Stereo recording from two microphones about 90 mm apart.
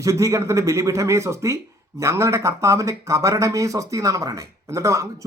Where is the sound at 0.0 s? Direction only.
35° right (ahead or behind).